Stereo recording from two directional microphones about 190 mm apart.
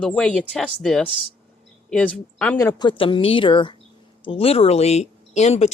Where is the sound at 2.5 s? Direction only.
20° left (ahead or behind).